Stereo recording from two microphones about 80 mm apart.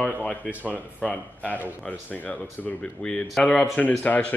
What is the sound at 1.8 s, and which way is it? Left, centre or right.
Speech, centre.